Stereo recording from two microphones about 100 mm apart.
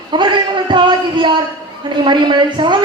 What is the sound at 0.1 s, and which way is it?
A man's voice, 50° right (ahead or behind).